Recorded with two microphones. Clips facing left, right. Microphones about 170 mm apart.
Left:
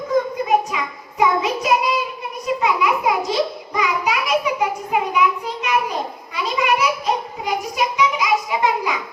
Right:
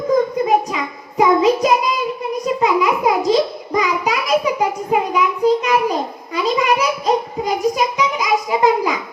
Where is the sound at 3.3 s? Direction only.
40° right (ahead or behind).